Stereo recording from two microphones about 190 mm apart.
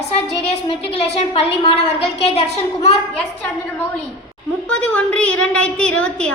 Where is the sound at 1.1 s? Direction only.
30° left (ahead or behind).